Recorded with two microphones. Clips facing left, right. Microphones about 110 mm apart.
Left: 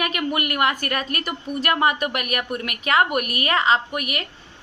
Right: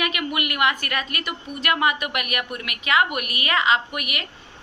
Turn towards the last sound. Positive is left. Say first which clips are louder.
# left 2 dB
turn(degrees=35)  # may be behind; listen again after turning